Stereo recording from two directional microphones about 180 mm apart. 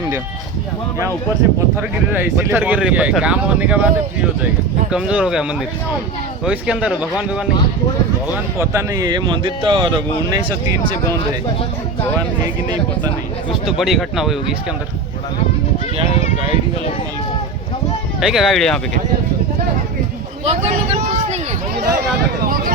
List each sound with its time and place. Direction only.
2.1 s speech: 10° right (ahead or behind)
8.3 s speech: 15° right (ahead or behind)
13.7 s speech: centre (ahead or behind)
18.2 s speech: centre (ahead or behind)
20.4 s a sound: 35° right (ahead or behind)
22.4 s a sound: 50° right (ahead or behind)